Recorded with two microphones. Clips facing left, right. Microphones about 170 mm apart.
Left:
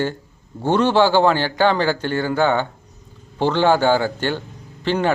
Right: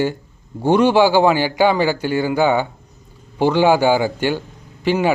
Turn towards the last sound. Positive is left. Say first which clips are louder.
# right 2 dB
turn(degrees=-10)  # may be behind; listen again after turning